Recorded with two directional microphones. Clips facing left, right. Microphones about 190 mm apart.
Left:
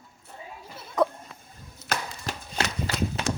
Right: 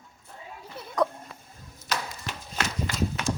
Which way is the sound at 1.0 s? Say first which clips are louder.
Left 2 dB; 5° left (ahead or behind).